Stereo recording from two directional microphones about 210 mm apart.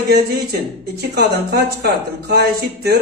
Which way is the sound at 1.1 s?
50° right (ahead or behind).